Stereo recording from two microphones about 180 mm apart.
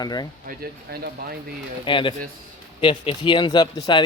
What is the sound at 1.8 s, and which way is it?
Speech, 25° left (ahead or behind).